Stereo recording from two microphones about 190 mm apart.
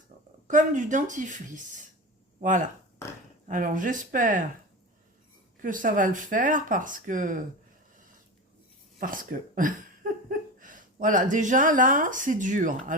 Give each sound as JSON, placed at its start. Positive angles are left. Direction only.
{"t": 0.4, "sound": "speech", "side_deg": -40}
{"t": 5.6, "sound": "speech", "side_deg": -45}
{"t": 9.0, "sound": "speech", "side_deg": -45}